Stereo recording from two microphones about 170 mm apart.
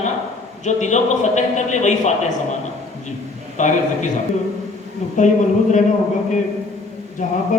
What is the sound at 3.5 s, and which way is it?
Speech, 45° left (ahead or behind).